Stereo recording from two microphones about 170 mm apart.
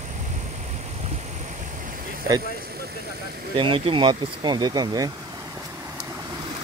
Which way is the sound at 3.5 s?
30° right (ahead or behind).